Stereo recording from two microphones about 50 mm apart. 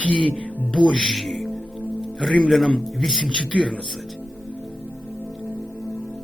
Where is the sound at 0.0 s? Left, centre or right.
Left.